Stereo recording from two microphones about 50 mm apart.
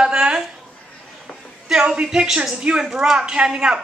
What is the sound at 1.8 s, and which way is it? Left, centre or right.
Speech, centre.